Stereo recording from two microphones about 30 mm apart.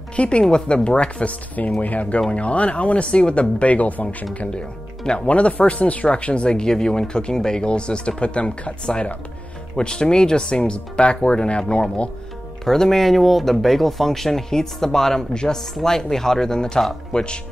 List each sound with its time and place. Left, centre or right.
0.1 s a woman's voice: left
0.4 s speech: left
1.8 s speech: left
3.6 s speech: left
5.0 s speech: left
6.0 s speech: left
7.6 s speech: left
9.8 s speech: left
12.6 s speech: centre; by 17.4 s left